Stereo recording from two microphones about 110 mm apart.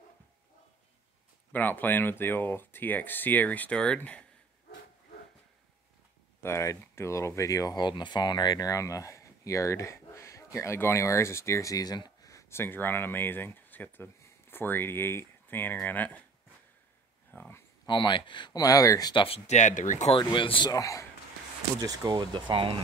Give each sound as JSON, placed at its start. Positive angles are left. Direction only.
{"t": 1.5, "sound": "speech", "side_deg": 15}
{"t": 6.4, "sound": "speech", "side_deg": 25}
{"t": 17.3, "sound": "speech", "side_deg": 20}
{"t": 17.8, "sound": "speech", "side_deg": 45}
{"t": 19.2, "sound": "speech", "side_deg": 75}
{"t": 20.2, "sound": "speech", "side_deg": 50}
{"t": 20.7, "sound": "speech", "side_deg": 30}
{"t": 21.8, "sound": "speech", "side_deg": -40}